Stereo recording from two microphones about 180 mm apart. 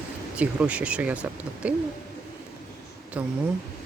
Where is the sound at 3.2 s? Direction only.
10° right (ahead or behind).